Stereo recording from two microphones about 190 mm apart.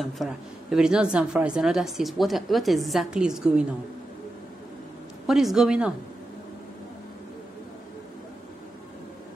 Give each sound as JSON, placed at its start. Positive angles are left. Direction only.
{"t": 0.0, "sound": "a woman's voice", "side_deg": 0}
{"t": 5.2, "sound": "a woman's voice", "side_deg": 0}